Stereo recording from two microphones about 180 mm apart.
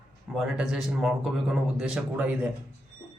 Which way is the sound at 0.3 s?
5° right (ahead or behind).